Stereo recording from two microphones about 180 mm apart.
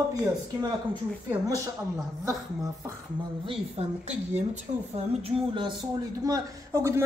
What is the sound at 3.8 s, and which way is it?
Speech, 35° right (ahead or behind).